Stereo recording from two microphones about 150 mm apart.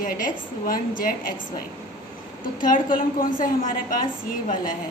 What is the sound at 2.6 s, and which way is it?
A woman's voice, 65° left (ahead or behind).